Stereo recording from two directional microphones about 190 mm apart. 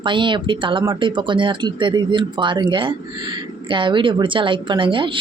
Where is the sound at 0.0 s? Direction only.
25° right (ahead or behind).